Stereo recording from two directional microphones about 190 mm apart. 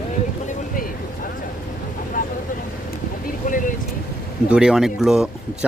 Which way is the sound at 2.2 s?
45° left (ahead or behind).